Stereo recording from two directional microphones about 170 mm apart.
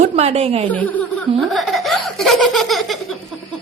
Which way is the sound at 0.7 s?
10° left (ahead or behind).